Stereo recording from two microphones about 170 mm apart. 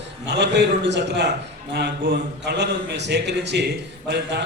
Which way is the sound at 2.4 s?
90° right.